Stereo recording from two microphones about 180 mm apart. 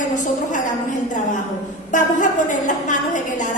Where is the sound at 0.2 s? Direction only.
45° left (ahead or behind).